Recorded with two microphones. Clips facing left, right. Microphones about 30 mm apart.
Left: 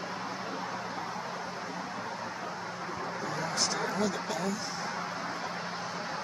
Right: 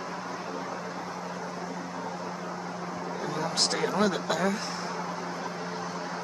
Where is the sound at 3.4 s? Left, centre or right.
Right.